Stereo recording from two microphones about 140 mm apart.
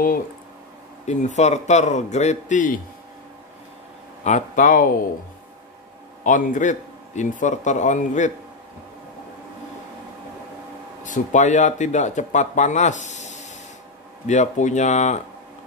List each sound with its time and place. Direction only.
1.0 s speech: 55° left (ahead or behind)
4.2 s speech: 65° left (ahead or behind)
6.2 s speech: 65° left (ahead or behind)
11.1 s speech: 65° left (ahead or behind)